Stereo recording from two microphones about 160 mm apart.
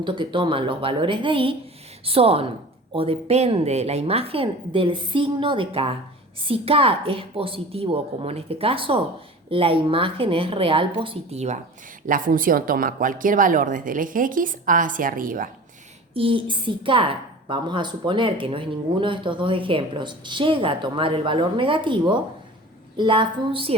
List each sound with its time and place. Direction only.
0.0 s a woman's voice: 30° right (ahead or behind)
12.0 s speech: 60° right (ahead or behind)
16.1 s a woman's voice: 35° right (ahead or behind)